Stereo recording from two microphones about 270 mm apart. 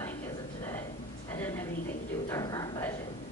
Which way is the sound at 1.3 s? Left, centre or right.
Centre.